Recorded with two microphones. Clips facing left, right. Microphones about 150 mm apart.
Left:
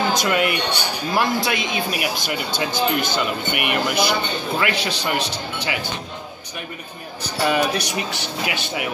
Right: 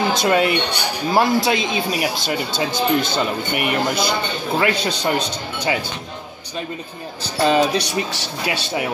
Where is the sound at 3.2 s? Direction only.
30° right (ahead or behind).